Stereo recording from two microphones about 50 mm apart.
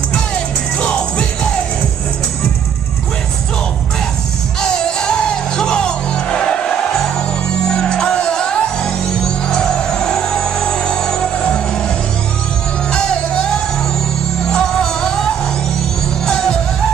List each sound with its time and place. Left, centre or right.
0.7 s music: left
4.6 s music: centre
14.5 s music: centre